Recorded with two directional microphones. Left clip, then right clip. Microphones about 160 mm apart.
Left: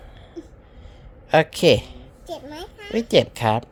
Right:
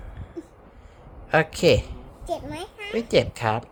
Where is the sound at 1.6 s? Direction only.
35° left (ahead or behind).